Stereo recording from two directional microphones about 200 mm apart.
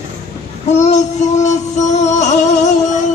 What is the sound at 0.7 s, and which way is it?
Music, 35° left (ahead or behind).